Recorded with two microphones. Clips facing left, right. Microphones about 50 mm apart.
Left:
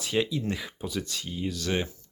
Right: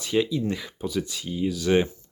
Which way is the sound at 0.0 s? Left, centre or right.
Centre.